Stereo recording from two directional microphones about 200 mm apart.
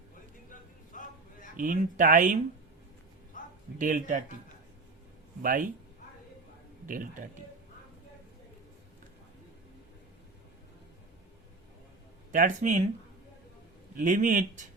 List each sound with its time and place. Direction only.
1.5 s speech: 40° right (ahead or behind)
3.8 s speech: 40° right (ahead or behind)
5.4 s speech: 45° right (ahead or behind)
6.8 s speech: 40° right (ahead or behind)
12.3 s speech: 40° right (ahead or behind)
13.9 s speech: 40° right (ahead or behind)